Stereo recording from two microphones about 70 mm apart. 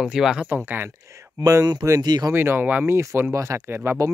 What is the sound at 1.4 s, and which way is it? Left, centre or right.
Speech, right.